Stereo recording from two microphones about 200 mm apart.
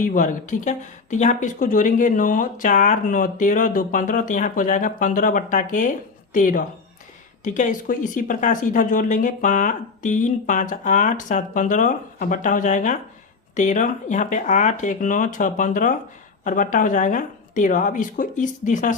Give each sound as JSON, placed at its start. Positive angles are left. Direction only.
{"t": 0.0, "sound": "speech", "side_deg": 40}